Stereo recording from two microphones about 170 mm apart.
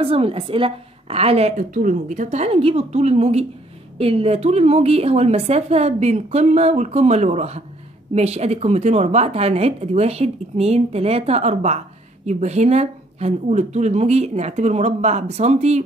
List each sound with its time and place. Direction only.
0.0 s a woman's voice: 35° right (ahead or behind)
1.6 s a woman's voice: 50° right (ahead or behind)